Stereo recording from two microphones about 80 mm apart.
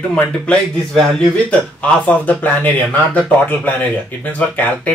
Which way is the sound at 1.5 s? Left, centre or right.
Centre.